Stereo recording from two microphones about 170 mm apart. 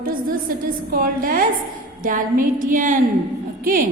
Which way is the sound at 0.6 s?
60° right (ahead or behind).